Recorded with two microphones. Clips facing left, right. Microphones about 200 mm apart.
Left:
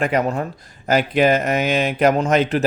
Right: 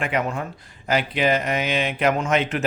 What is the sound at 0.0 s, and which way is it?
Speech, 40° left (ahead or behind).